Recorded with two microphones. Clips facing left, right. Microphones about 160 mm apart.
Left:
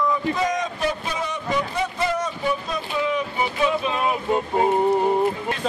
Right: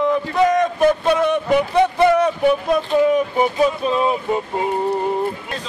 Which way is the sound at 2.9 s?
45° right (ahead or behind).